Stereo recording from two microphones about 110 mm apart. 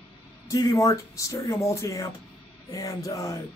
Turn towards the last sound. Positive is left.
turn(degrees=30)  # may be behind; listen again after turning